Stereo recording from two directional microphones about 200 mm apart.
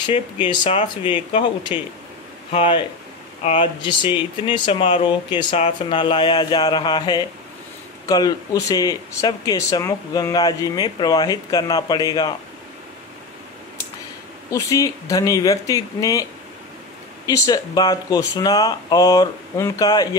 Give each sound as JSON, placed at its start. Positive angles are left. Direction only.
{"t": 0.0, "sound": "speech", "side_deg": 25}
{"t": 14.5, "sound": "speech", "side_deg": 15}
{"t": 17.3, "sound": "speech", "side_deg": 20}